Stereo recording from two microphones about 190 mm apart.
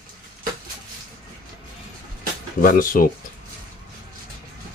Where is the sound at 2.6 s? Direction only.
45° left (ahead or behind).